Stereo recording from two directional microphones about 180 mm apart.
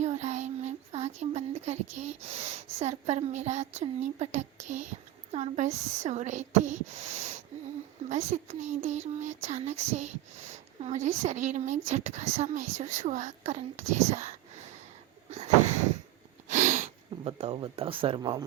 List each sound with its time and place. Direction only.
0.0 s child singing: 40° right (ahead or behind)
8.1 s speech: 40° right (ahead or behind)
16.5 s speech: 40° right (ahead or behind); by 18.4 s 20° right (ahead or behind)